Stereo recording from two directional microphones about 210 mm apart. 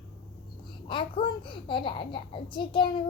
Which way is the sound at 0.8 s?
25° left (ahead or behind).